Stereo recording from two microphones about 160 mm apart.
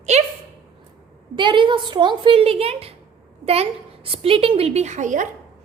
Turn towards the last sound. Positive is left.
turn(degrees=-50)  # may be behind; listen again after turning